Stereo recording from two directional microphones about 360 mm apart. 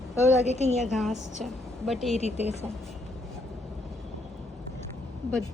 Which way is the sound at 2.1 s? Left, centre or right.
Centre.